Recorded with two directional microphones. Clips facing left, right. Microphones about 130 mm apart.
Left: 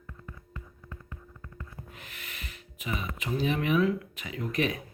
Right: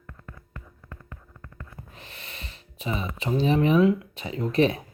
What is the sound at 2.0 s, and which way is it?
Speech, 30° right (ahead or behind).